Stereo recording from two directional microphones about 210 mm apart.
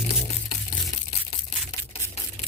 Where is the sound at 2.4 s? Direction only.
35° left (ahead or behind).